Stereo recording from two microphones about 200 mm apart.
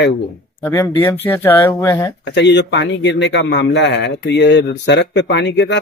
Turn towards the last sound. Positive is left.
turn(degrees=60)  # may be behind; listen again after turning